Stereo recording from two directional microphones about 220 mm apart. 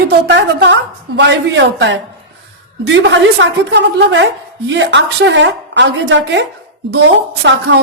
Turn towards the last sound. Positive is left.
turn(degrees=-50)  # may be behind; listen again after turning